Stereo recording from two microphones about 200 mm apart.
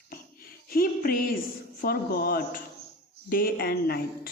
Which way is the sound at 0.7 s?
45° left (ahead or behind).